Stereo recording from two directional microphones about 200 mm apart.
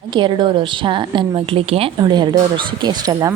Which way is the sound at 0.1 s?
25° right (ahead or behind).